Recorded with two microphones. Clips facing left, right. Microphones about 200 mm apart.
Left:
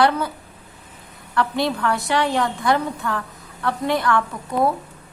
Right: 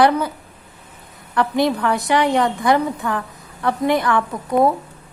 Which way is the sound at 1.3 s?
15° right (ahead or behind).